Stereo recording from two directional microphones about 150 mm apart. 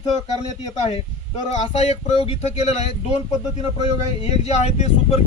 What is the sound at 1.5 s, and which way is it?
Speech, 50° left (ahead or behind).